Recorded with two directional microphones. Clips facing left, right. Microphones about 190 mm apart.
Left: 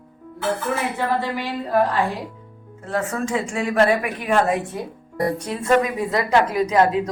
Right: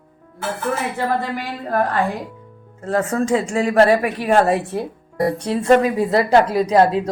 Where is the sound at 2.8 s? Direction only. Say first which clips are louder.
Right 5 dB; 40° right (ahead or behind).